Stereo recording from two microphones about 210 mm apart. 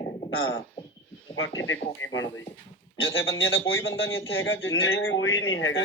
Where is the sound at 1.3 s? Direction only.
70° left (ahead or behind).